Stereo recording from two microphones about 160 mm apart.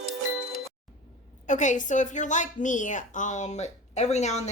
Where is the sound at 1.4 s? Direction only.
50° left (ahead or behind).